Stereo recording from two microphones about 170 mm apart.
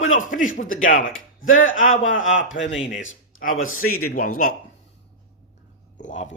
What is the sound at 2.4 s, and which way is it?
Speech, 90° left.